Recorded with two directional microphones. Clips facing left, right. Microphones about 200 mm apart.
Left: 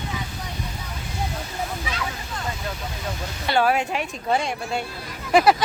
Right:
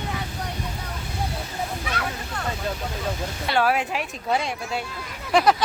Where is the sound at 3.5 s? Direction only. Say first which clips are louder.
Left 2 dB; centre (ahead or behind).